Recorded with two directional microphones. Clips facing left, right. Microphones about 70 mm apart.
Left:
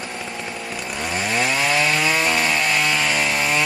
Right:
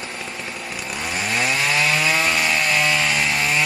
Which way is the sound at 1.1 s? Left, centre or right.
Left.